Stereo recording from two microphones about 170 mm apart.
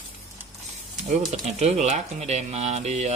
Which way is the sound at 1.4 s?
40° right (ahead or behind).